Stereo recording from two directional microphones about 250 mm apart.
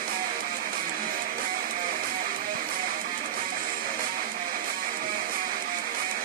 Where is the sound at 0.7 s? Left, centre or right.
Right.